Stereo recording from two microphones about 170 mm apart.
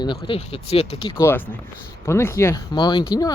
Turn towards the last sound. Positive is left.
turn(degrees=25)  # may be behind; listen again after turning